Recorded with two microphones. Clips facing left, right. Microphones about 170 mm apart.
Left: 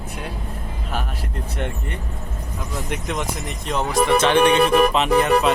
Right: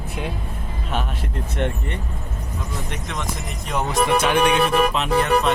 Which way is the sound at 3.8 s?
20° right (ahead or behind).